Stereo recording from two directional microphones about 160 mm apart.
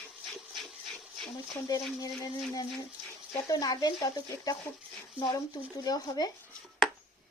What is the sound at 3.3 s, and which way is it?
Speech, 20° left (ahead or behind).